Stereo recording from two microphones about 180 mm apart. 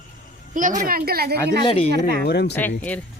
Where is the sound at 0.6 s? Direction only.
45° right (ahead or behind).